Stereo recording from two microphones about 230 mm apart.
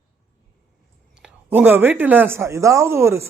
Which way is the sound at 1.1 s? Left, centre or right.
Centre.